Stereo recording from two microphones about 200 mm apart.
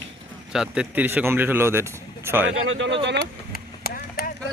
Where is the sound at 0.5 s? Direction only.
5° right (ahead or behind).